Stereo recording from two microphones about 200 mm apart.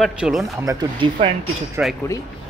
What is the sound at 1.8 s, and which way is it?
Speech, 5° right (ahead or behind).